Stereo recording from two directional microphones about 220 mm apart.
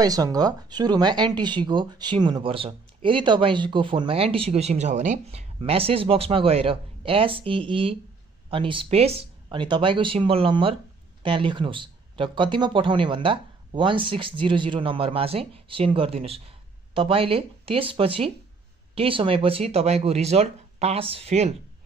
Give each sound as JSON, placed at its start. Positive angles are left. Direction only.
{"t": 0.0, "sound": "speech", "side_deg": -15}